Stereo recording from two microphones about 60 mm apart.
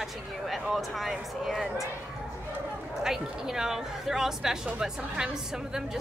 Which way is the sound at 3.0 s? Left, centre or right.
Centre.